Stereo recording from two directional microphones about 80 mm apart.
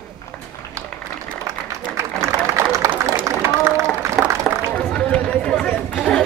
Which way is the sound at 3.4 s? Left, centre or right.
Right.